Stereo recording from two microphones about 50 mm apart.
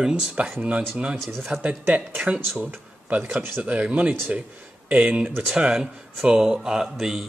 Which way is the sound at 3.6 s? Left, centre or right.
Right.